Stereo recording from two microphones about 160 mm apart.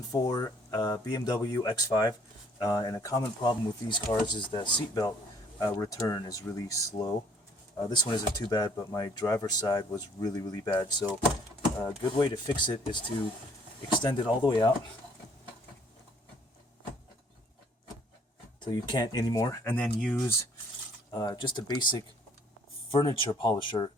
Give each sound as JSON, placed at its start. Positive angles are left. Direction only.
{"t": 0.1, "sound": "speech", "side_deg": 25}
{"t": 14.0, "sound": "speech", "side_deg": 30}
{"t": 18.6, "sound": "speech", "side_deg": 25}
{"t": 21.1, "sound": "speech", "side_deg": 25}